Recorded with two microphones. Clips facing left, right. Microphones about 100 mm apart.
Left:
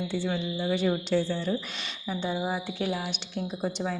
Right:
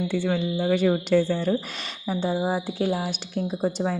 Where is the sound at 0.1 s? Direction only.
50° right (ahead or behind).